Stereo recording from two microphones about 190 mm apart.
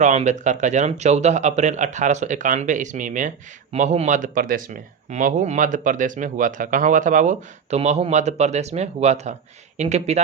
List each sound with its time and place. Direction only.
0.0 s speech: 40° right (ahead or behind)